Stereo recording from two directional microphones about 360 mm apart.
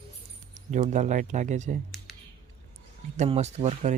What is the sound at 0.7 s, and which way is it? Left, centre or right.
Speech, centre.